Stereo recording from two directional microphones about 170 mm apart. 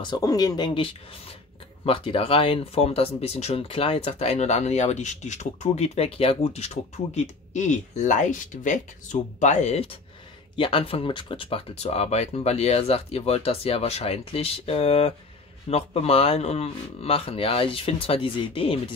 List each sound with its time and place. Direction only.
0.0 s speech: 25° left (ahead or behind)